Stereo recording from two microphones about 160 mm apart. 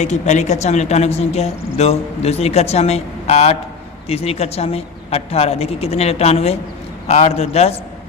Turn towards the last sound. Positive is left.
turn(degrees=40)  # may be behind; listen again after turning